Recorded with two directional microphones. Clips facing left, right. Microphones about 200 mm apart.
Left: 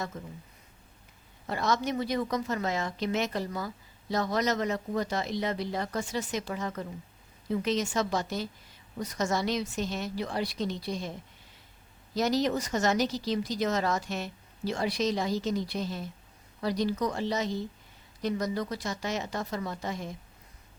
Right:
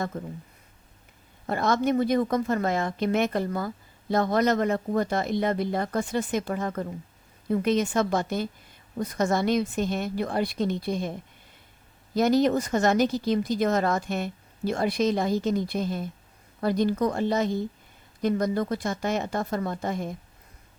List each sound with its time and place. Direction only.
0.1 s speech: 50° right (ahead or behind)
1.5 s speech: 55° right (ahead or behind)
12.1 s speech: 55° right (ahead or behind)